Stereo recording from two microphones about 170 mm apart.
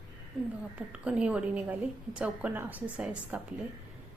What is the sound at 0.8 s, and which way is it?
A woman's voice, 5° right (ahead or behind).